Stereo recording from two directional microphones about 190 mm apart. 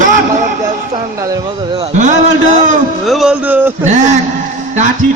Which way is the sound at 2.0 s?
40° right (ahead or behind).